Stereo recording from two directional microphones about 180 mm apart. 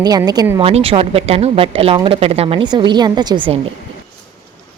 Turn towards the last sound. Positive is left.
turn(degrees=-25)  # may be behind; listen again after turning